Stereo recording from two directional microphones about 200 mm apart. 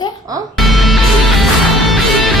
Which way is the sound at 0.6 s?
Centre (ahead or behind).